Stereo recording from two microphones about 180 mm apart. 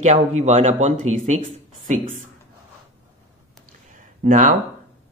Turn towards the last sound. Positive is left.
turn(degrees=-45)  # may be behind; listen again after turning